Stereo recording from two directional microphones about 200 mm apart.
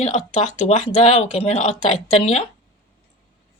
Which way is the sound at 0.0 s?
35° left (ahead or behind).